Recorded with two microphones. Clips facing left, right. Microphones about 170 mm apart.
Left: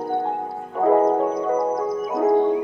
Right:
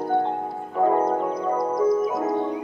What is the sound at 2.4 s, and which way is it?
Music, 30° left (ahead or behind).